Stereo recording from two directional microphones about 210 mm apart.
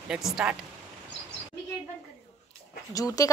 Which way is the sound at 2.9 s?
15° left (ahead or behind).